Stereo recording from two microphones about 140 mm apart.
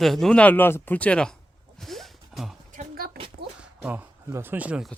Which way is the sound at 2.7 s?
75° right (ahead or behind).